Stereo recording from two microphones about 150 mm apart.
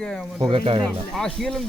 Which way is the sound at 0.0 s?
5° left (ahead or behind).